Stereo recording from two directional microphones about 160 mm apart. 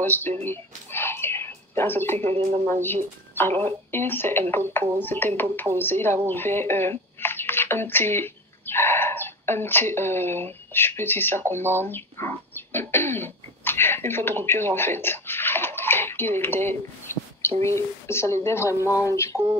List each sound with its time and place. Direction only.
0.0 s speech: 10° left (ahead or behind)
0.4 s a sound: 15° left (ahead or behind)
2.8 s speech: 15° left (ahead or behind)